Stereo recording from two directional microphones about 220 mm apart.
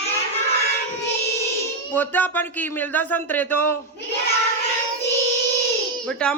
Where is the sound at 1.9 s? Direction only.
10° left (ahead or behind).